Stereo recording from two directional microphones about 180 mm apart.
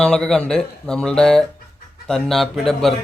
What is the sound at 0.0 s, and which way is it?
Speech, 5° left (ahead or behind).